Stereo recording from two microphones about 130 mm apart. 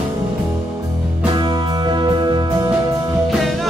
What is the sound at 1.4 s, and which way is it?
Music, 35° right (ahead or behind).